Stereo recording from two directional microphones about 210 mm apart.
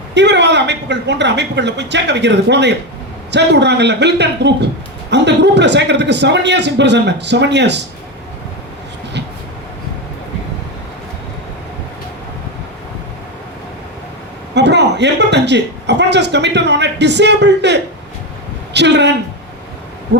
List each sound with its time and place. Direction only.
0.1 s a man's voice: 55° right (ahead or behind)
14.5 s a man's voice: 55° right (ahead or behind)